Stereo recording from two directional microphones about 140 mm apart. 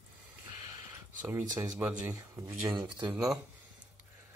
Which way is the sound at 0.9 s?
15° right (ahead or behind).